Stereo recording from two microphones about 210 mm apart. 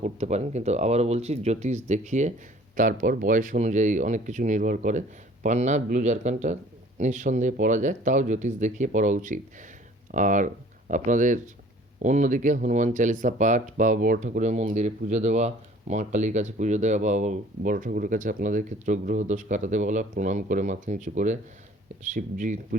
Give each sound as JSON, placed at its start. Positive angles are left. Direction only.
{"t": 0.0, "sound": "speech", "side_deg": -30}